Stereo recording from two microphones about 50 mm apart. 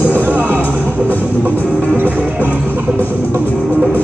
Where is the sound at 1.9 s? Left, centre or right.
Right.